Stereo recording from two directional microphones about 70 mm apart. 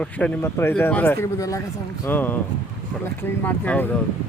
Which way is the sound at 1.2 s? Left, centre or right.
Left.